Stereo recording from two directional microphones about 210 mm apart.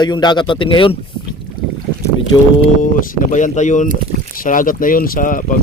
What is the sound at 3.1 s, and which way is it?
Speech, 40° left (ahead or behind).